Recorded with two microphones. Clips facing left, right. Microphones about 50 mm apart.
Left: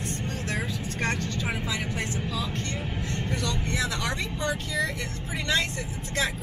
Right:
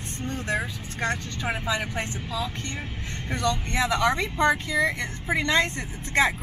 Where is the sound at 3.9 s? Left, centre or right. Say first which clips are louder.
Right 8 dB; centre.